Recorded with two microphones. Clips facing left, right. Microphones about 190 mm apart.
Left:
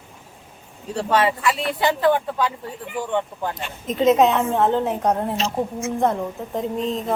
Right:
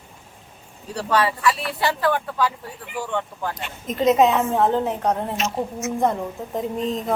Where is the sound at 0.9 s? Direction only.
25° left (ahead or behind).